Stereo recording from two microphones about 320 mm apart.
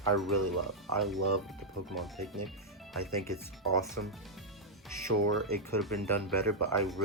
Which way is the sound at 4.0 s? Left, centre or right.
Right.